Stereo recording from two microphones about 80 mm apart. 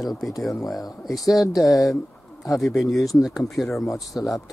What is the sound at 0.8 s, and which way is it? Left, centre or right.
Speech, left.